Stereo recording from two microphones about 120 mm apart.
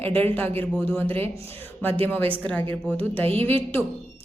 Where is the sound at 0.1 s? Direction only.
15° left (ahead or behind).